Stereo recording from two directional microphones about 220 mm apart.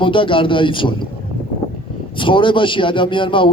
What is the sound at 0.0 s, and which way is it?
Speech, 20° left (ahead or behind).